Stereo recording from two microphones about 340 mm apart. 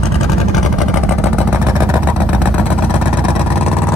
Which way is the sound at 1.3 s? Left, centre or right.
Centre.